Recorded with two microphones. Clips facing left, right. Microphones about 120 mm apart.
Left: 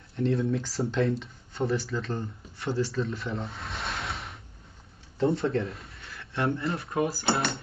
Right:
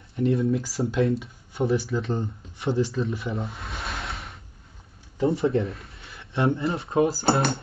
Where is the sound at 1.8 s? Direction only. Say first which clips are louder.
Right 5 dB; 25° right (ahead or behind).